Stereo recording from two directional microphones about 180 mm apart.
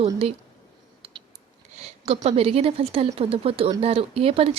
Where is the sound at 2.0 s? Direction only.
35° right (ahead or behind).